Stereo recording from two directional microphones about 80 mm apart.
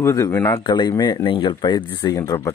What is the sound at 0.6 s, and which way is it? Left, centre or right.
Speech, left.